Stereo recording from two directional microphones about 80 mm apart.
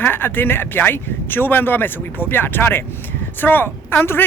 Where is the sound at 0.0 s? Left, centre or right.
Left.